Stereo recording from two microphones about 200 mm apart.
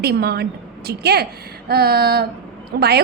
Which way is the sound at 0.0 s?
55° right (ahead or behind).